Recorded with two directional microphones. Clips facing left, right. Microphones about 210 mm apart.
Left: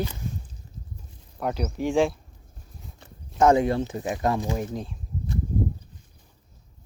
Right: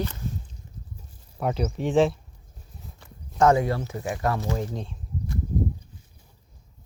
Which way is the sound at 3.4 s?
20° left (ahead or behind).